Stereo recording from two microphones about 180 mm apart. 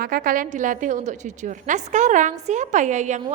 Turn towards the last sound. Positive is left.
turn(degrees=-40)  # may be behind; listen again after turning